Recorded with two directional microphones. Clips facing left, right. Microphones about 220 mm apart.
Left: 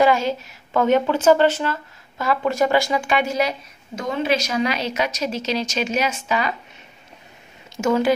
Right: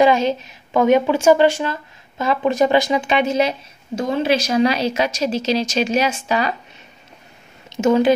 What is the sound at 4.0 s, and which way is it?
Speech, 35° right (ahead or behind).